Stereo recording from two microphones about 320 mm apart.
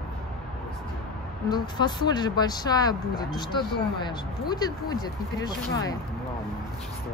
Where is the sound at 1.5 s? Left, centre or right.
Centre.